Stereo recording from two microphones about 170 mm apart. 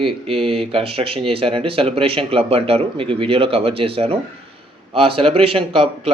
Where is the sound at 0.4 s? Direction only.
35° right (ahead or behind).